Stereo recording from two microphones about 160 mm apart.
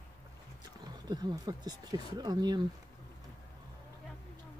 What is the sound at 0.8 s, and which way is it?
Speech, 25° right (ahead or behind).